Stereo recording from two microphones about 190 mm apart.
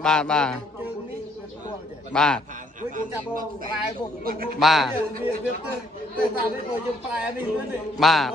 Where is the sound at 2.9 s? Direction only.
45° right (ahead or behind).